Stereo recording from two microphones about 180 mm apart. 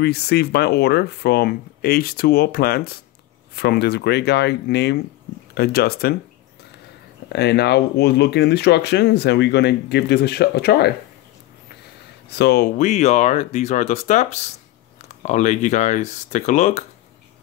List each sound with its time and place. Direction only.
0.0 s speech: 65° left (ahead or behind)
7.3 s speech: 65° left (ahead or behind)
12.3 s speech: 65° left (ahead or behind); by 16.8 s 40° left (ahead or behind)